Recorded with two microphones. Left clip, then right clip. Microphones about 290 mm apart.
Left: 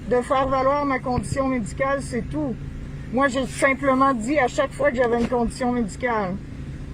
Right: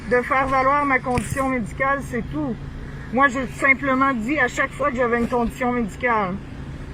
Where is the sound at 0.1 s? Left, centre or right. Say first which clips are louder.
Right 1 dB; left.